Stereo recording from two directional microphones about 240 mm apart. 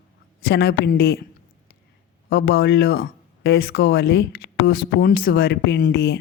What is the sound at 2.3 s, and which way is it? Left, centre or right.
Speech, left.